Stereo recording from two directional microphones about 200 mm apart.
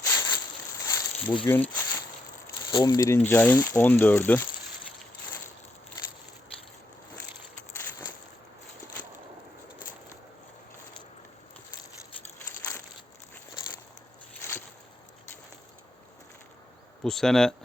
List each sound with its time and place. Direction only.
0.0 s a sound: 15° left (ahead or behind)
1.5 s speech: 10° left (ahead or behind)
2.6 s speech: 20° left (ahead or behind)
3.2 s speech: 10° left (ahead or behind)
17.0 s speech: centre (ahead or behind)